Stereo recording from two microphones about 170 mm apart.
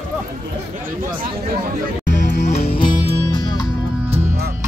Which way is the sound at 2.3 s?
45° left (ahead or behind).